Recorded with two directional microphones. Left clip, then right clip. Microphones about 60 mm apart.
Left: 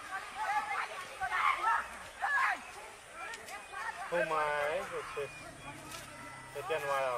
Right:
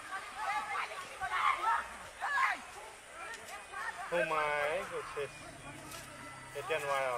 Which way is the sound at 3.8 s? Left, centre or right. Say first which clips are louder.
Even; right.